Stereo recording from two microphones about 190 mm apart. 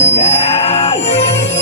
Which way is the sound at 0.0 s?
35° left (ahead or behind).